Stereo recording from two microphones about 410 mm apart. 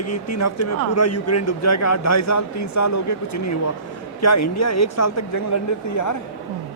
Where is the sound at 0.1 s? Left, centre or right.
Left.